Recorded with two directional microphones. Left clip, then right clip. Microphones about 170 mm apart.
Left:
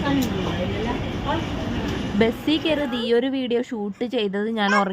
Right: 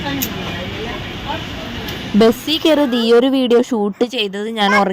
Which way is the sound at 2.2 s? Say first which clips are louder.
Right 8 dB; 35° right (ahead or behind).